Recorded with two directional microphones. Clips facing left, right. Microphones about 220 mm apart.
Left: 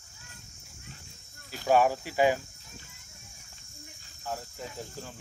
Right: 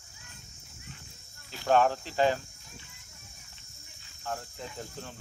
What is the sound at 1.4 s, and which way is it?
Cricket, 45° left (ahead or behind).